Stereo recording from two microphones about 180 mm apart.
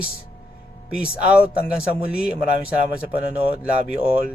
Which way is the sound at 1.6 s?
55° left (ahead or behind).